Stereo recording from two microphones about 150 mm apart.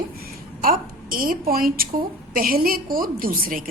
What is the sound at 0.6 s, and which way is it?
A woman's voice, 70° right (ahead or behind).